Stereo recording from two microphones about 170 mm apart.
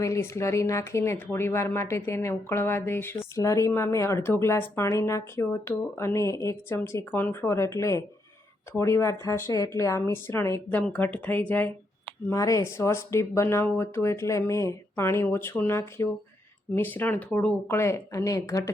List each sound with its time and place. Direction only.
0.0 s speech: 15° left (ahead or behind)